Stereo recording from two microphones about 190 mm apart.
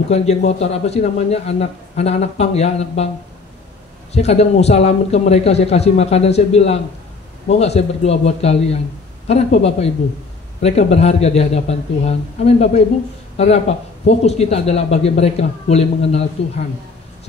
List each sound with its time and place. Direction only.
0.1 s speech: 35° left (ahead or behind)
4.1 s speech: 35° left (ahead or behind)